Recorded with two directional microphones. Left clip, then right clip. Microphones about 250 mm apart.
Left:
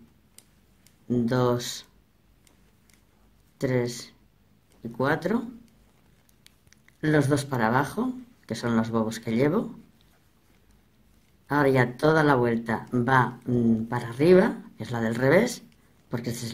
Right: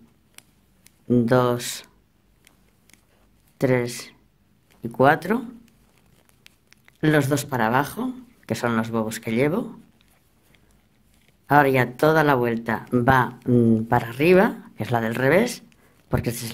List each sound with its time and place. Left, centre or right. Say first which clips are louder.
1.0 s speech: right 6 dB; right
3.5 s speech: right 5 dB; right
6.4 s speech: right 5 dB; right
11.4 s speech: right 5 dB; right